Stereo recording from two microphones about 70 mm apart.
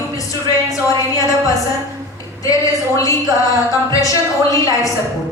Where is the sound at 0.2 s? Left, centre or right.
Left.